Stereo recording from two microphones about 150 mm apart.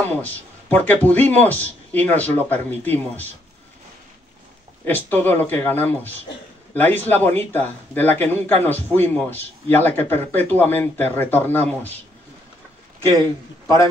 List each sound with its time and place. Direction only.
0.2 s a man's voice: 10° left (ahead or behind)
4.8 s a man's voice: 15° left (ahead or behind)
13.2 s a man's voice: 20° left (ahead or behind)